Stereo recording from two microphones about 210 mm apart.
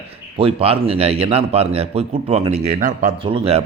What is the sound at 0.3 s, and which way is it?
A man's voice, 25° right (ahead or behind).